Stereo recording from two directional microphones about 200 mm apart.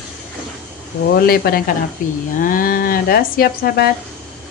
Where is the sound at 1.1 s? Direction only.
50° left (ahead or behind).